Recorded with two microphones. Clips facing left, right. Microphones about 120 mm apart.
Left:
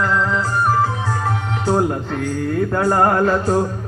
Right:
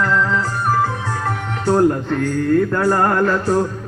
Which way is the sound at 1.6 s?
10° left (ahead or behind).